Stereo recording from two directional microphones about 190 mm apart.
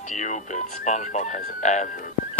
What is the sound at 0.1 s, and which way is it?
Speech, 40° left (ahead or behind).